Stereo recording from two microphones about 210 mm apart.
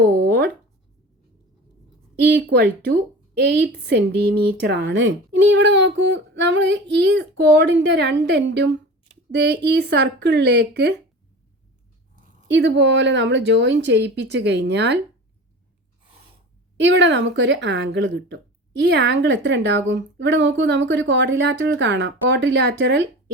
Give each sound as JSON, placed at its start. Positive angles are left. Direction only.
{"t": 0.0, "sound": "a sound", "side_deg": -50}
{"t": 2.3, "sound": "speech", "side_deg": -50}
{"t": 12.5, "sound": "speech", "side_deg": -55}
{"t": 16.7, "sound": "speech", "side_deg": -60}